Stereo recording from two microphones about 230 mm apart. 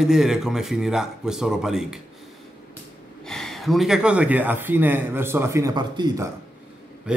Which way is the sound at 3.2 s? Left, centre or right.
Centre.